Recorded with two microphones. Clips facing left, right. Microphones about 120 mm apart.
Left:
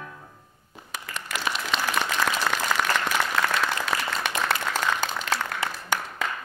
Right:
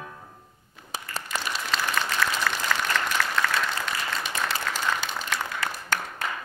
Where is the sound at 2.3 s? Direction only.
90° left.